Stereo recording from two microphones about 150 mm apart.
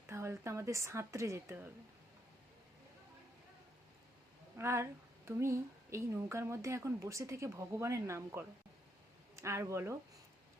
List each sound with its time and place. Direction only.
0.1 s a woman's voice: 20° right (ahead or behind)
4.5 s a woman's voice: 15° right (ahead or behind)